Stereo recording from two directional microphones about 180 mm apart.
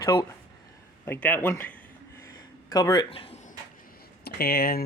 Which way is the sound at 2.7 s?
20° left (ahead or behind).